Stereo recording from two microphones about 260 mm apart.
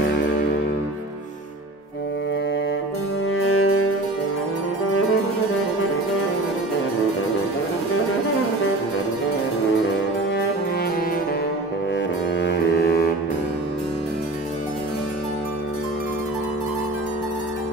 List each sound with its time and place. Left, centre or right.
3.4 s music: left
12.4 s music: left